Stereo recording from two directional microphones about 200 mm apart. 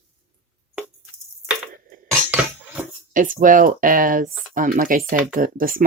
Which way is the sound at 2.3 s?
5° right (ahead or behind).